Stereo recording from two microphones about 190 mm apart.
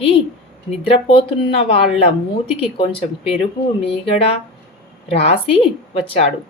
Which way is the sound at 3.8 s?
30° left (ahead or behind).